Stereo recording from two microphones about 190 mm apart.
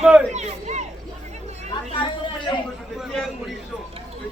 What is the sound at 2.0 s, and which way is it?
Chatter, 25° left (ahead or behind).